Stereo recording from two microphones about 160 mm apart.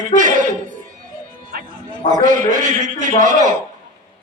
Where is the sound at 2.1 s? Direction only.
50° right (ahead or behind).